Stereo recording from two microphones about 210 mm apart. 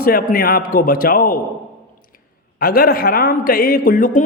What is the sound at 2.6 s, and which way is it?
A man's voice, 45° left (ahead or behind).